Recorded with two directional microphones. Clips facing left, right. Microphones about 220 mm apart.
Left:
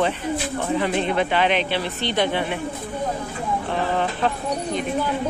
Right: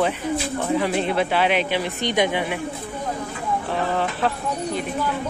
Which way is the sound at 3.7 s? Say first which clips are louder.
Even; 5° right (ahead or behind).